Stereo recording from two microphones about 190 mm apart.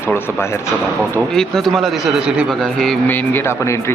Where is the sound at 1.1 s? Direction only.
Centre (ahead or behind).